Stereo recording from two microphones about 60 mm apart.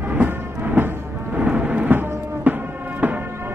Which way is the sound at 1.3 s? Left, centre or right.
Right.